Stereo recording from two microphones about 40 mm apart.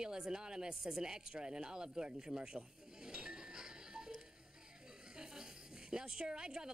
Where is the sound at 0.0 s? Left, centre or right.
Centre.